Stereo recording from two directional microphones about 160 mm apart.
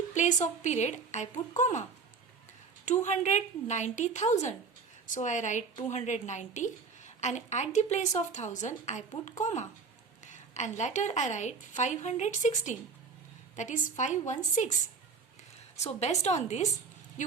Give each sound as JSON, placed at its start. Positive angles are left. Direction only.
{"t": 0.1, "sound": "a woman's voice", "side_deg": 50}
{"t": 2.8, "sound": "a woman's voice", "side_deg": 50}
{"t": 16.0, "sound": "a woman's voice", "side_deg": 45}